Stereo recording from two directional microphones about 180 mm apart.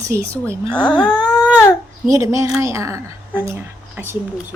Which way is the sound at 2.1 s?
20° right (ahead or behind).